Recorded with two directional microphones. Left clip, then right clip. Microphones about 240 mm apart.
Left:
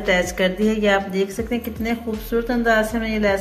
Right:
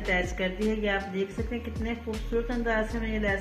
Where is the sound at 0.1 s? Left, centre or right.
Centre.